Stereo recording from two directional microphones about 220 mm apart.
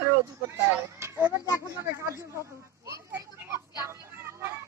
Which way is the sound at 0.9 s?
10° right (ahead or behind).